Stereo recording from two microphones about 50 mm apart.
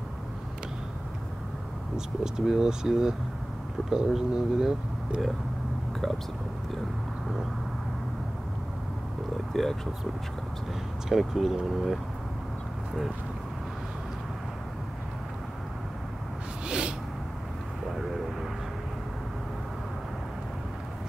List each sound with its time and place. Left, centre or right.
2.0 s speech: centre
9.5 s speech: centre
11.1 s speech: centre
16.6 s a sound: centre